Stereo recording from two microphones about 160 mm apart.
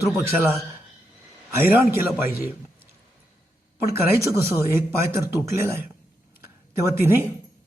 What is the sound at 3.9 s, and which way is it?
Speech, 15° right (ahead or behind).